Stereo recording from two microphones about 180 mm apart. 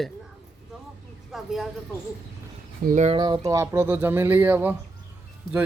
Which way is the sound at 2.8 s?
45° right (ahead or behind).